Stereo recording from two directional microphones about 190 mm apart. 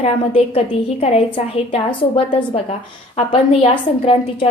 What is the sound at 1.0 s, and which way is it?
Speech, 30° left (ahead or behind).